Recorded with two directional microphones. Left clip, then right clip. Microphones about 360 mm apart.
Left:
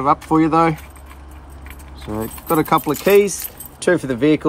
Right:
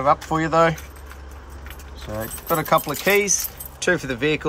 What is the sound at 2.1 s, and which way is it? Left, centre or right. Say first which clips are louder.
Speech: left 5 dB; centre.